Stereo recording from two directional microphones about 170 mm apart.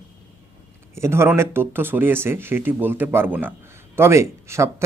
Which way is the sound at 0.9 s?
15° right (ahead or behind).